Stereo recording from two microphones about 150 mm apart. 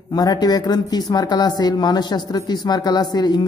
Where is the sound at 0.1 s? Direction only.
25° left (ahead or behind).